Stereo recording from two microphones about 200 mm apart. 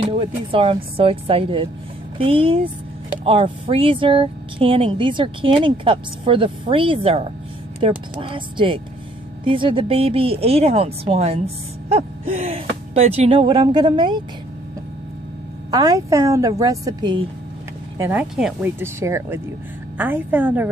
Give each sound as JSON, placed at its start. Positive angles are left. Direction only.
{"t": 0.0, "sound": "speech", "side_deg": -30}
{"t": 15.7, "sound": "a woman's voice", "side_deg": -20}